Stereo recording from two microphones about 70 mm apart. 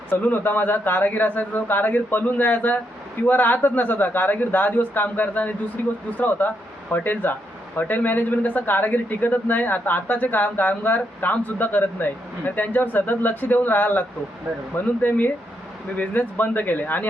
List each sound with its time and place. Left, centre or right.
0.1 s speech: left
16.0 s speech: left